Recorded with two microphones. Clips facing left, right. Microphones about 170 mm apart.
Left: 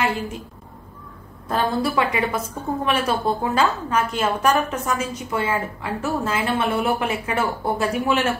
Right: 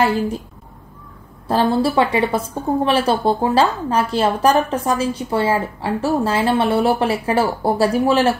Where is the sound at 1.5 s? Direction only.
30° right (ahead or behind).